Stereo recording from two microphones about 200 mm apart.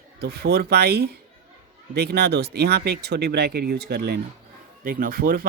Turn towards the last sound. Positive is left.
turn(degrees=-45)  # may be behind; listen again after turning